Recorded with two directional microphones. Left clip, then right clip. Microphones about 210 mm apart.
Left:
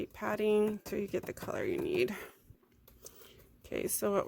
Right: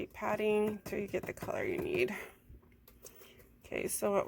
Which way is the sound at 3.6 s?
55° left (ahead or behind).